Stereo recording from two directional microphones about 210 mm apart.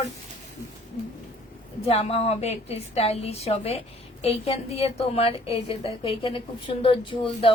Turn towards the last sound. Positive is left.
turn(degrees=25)  # may be behind; listen again after turning